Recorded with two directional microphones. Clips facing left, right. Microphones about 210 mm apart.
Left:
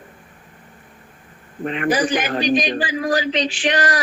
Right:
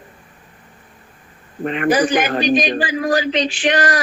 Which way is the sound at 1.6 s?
50° right (ahead or behind).